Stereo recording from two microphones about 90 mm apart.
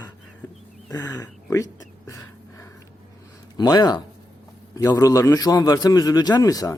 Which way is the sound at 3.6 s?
50° left (ahead or behind).